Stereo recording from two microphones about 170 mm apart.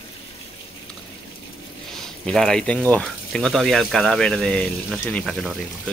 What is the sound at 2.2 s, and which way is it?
Speech, 5° left (ahead or behind).